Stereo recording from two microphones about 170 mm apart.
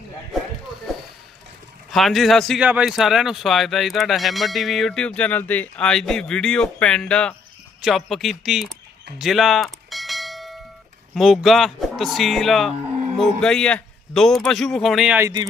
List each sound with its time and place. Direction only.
1.9 s speech: centre (ahead or behind)
9.1 s bell: centre (ahead or behind)
11.1 s speech: centre (ahead or behind)
15.2 s speech: 25° right (ahead or behind)